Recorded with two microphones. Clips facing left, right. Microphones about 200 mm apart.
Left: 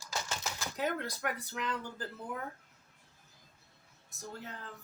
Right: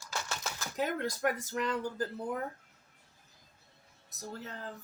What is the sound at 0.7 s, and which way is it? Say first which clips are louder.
Speech: right 3 dB; 45° right (ahead or behind).